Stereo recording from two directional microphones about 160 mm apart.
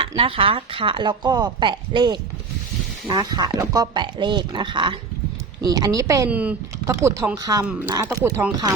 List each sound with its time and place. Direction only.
0.0 s speech: 35° right (ahead or behind)
3.2 s speech: 25° right (ahead or behind)
6.2 s speech: 10° right (ahead or behind)